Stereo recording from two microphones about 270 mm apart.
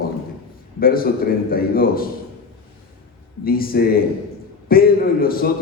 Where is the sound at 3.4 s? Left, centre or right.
Left.